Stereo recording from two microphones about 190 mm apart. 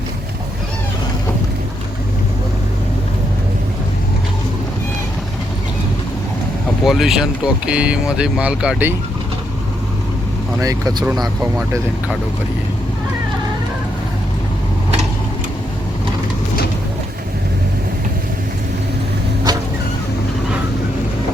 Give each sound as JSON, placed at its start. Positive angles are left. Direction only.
{"t": 6.8, "sound": "speech", "side_deg": 0}
{"t": 10.6, "sound": "speech", "side_deg": -20}
{"t": 19.5, "sound": "vehicle", "side_deg": -20}